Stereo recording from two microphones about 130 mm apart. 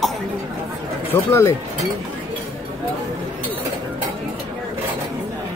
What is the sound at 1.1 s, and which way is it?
Speech, 20° left (ahead or behind).